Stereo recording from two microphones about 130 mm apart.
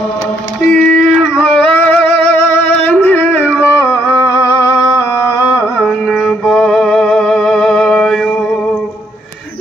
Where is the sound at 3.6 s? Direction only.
20° left (ahead or behind).